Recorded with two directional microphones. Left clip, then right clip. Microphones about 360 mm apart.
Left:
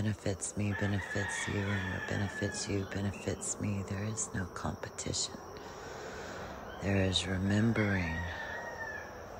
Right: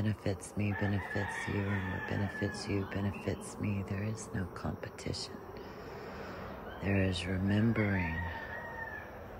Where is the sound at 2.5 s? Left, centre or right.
Centre.